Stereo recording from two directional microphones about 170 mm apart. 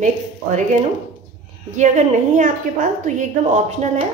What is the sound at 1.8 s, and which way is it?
A woman's voice, 45° right (ahead or behind).